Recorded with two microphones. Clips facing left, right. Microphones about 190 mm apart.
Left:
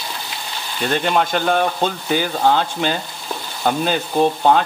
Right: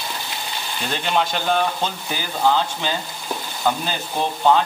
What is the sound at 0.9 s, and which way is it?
Stir, 55° left (ahead or behind).